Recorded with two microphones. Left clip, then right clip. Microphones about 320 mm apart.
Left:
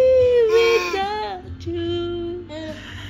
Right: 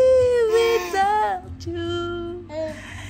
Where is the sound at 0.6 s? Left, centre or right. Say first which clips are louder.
Left 3 dB; centre.